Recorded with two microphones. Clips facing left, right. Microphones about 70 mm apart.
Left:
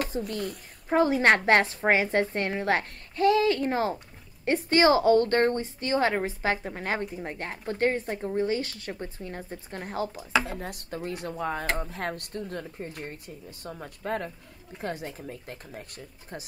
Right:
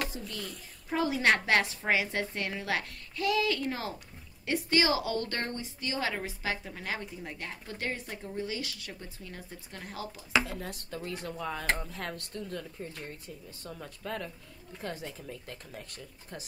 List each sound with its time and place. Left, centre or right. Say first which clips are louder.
0.3 s a woman's voice: left 8 dB; left